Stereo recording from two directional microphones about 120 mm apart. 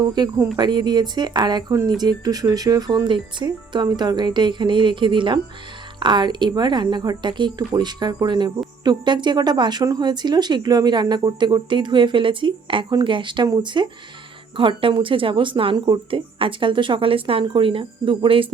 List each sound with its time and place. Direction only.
0.1 s speech: 35° right (ahead or behind)